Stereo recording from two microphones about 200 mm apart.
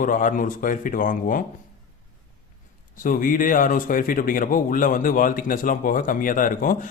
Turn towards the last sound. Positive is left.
turn(degrees=45)  # may be behind; listen again after turning